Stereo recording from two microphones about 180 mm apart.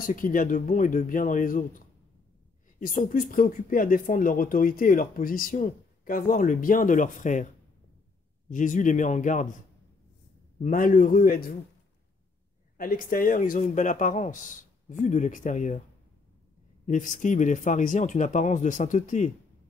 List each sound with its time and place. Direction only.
0.0 s speech: 50° left (ahead or behind)
2.8 s speech: 50° left (ahead or behind)
8.5 s speech: 45° left (ahead or behind)
10.6 s speech: 50° left (ahead or behind)
12.7 s speech: 55° left (ahead or behind)
16.8 s speech: 45° left (ahead or behind)